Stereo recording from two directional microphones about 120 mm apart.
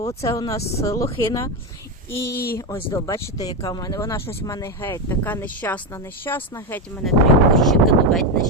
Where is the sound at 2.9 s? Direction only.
30° left (ahead or behind).